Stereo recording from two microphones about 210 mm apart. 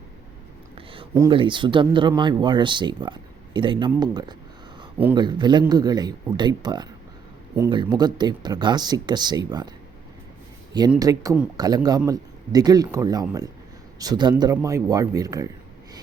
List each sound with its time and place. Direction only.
1.1 s speech: 20° right (ahead or behind)
7.9 s speech: 20° right (ahead or behind)
11.0 s speech: 15° right (ahead or behind)